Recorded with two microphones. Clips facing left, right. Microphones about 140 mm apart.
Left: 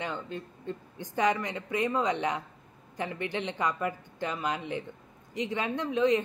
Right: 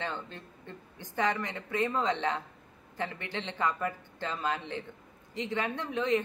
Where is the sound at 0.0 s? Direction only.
15° left (ahead or behind).